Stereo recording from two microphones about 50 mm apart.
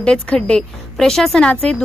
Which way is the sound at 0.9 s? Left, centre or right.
Centre.